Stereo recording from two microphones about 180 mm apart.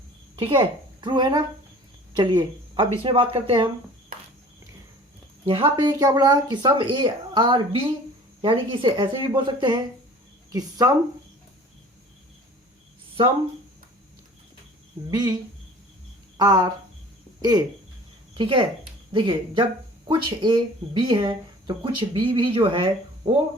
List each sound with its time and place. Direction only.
0.3 s a woman's voice: 30° right (ahead or behind)
5.5 s speech: 25° right (ahead or behind)
15.1 s speech: 20° right (ahead or behind)
16.4 s speech: 20° right (ahead or behind)
18.3 s speech: 30° right (ahead or behind)